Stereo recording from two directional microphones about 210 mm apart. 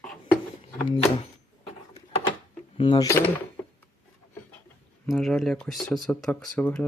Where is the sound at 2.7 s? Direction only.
25° left (ahead or behind).